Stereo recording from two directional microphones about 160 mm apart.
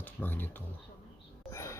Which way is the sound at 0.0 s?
10° left (ahead or behind).